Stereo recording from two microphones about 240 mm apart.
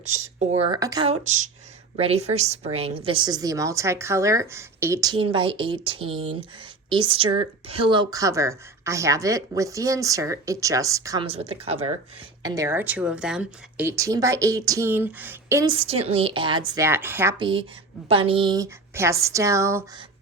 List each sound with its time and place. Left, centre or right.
0.1 s a woman's voice: right
0.8 s a woman's voice: centre
17.4 s a woman's voice: right